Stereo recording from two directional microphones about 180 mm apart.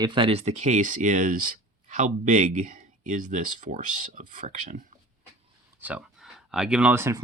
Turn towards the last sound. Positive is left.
turn(degrees=-15)  # may be behind; listen again after turning